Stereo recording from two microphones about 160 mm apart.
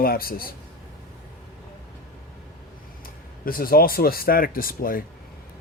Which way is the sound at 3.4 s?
65° left (ahead or behind).